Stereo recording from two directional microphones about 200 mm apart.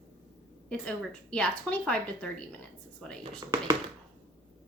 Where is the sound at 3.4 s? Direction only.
15° right (ahead or behind).